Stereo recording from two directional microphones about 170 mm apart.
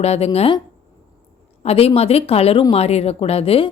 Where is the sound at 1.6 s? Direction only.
35° left (ahead or behind).